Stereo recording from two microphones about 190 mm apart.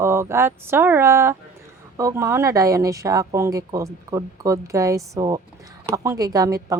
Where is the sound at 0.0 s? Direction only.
15° right (ahead or behind).